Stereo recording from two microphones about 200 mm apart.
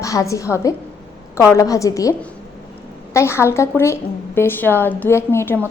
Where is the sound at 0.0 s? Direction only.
15° left (ahead or behind).